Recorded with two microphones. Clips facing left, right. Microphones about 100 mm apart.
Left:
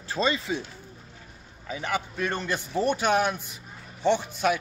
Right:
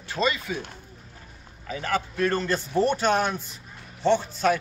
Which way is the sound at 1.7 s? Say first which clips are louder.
Right 2 dB; 15° left (ahead or behind).